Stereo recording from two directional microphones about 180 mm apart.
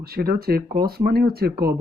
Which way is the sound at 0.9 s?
60° right (ahead or behind).